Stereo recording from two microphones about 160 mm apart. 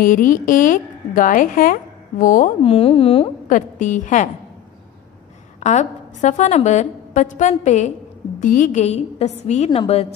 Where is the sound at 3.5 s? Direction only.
55° left (ahead or behind).